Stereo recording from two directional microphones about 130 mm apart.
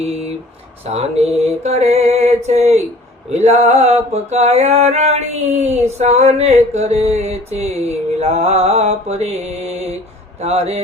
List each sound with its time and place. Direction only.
0.0 s speech: 55° right (ahead or behind)
0.9 s mantra: 55° right (ahead or behind)
10.4 s speech: 55° right (ahead or behind)